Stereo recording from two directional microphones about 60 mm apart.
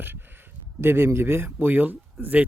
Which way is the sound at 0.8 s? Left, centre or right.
Right.